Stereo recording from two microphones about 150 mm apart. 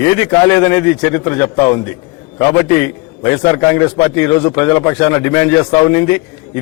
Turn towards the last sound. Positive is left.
turn(degrees=10)  # may be behind; listen again after turning